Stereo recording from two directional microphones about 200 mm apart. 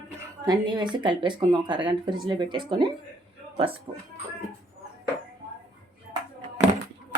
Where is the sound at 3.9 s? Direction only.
20° right (ahead or behind).